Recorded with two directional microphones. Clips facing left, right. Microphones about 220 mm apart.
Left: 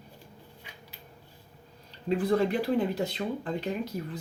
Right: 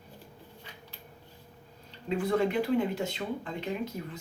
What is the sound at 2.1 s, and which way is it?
Speech, 35° left (ahead or behind).